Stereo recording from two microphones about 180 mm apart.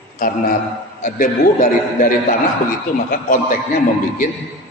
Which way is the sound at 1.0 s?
45° left (ahead or behind).